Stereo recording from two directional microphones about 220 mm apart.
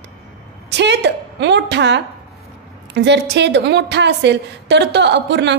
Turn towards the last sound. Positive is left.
turn(degrees=-50)  # may be behind; listen again after turning